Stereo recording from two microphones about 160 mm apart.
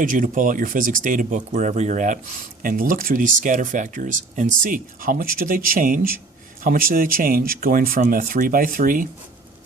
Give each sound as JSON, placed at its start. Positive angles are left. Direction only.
{"t": 0.0, "sound": "speech", "side_deg": -55}
{"t": 2.6, "sound": "speech", "side_deg": -60}